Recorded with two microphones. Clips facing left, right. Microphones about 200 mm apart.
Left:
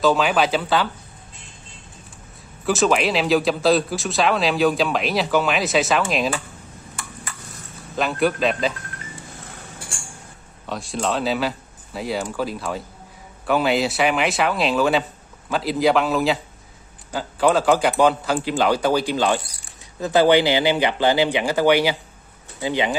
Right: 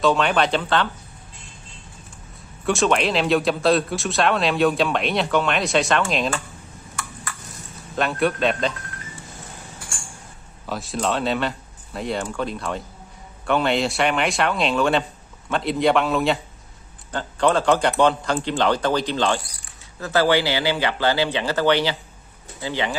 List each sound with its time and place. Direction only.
0.0 s speech: centre (ahead or behind)
2.6 s speech: centre (ahead or behind)
7.9 s speech: centre (ahead or behind)
10.7 s speech: centre (ahead or behind); by 22.9 s 15° left (ahead or behind)